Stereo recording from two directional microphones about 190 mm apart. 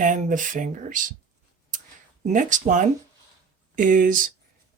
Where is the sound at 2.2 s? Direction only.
40° right (ahead or behind).